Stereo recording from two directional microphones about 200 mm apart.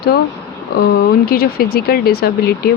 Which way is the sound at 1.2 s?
50° left (ahead or behind).